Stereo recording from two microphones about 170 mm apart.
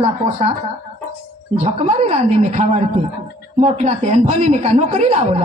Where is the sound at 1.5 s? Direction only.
40° right (ahead or behind).